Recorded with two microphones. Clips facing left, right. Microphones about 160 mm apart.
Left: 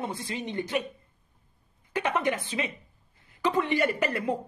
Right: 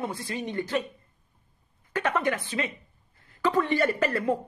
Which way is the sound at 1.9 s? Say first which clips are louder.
Right 1 dB; 15° left (ahead or behind).